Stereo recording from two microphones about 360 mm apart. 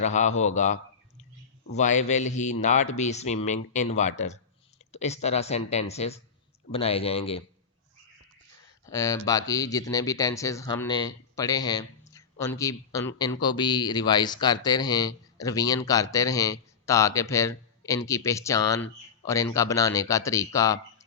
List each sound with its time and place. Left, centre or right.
0.0 s a man's voice: centre
8.9 s speech: centre